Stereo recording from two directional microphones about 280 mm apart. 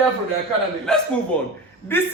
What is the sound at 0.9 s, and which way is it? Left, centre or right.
Speech, centre.